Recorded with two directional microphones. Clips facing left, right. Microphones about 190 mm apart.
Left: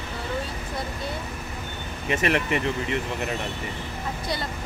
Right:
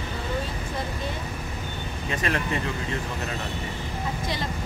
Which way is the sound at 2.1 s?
20° left (ahead or behind).